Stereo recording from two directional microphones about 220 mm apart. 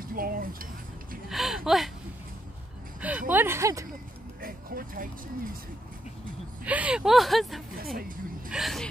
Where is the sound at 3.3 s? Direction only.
10° right (ahead or behind).